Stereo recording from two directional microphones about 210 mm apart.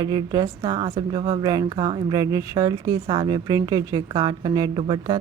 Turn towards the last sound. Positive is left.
turn(degrees=-20)  # may be behind; listen again after turning